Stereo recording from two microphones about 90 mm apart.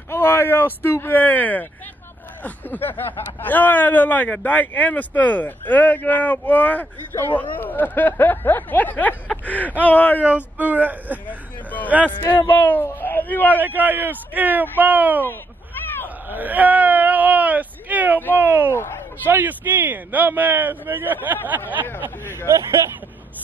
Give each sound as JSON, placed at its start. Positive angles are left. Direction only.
{"t": 0.1, "sound": "speech", "side_deg": 25}
{"t": 10.2, "sound": "speech", "side_deg": -20}
{"t": 11.2, "sound": "speech", "side_deg": 20}
{"t": 13.6, "sound": "speech", "side_deg": -20}
{"t": 16.3, "sound": "speech", "side_deg": -20}
{"t": 22.5, "sound": "speech", "side_deg": -35}